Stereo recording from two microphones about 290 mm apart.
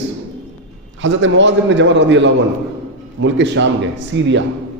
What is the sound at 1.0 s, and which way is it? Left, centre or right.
A man's voice, right.